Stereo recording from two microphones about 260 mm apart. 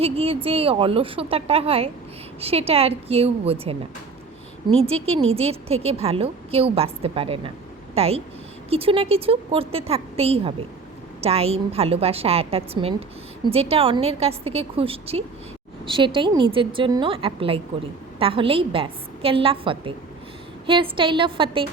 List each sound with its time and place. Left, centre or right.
0.0 s a woman's voice: right
20.9 s a woman's voice: centre